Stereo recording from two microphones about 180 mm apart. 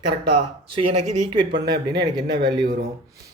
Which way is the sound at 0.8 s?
40° right (ahead or behind).